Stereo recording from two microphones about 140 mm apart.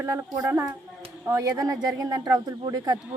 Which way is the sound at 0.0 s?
20° right (ahead or behind).